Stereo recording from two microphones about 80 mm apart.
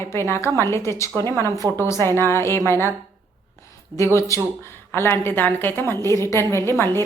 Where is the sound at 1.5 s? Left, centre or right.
Right.